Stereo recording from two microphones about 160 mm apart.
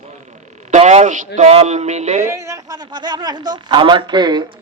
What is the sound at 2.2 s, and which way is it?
A man's voice, 20° right (ahead or behind).